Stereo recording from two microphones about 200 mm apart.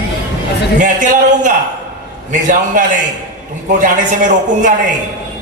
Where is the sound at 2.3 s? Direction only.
40° right (ahead or behind).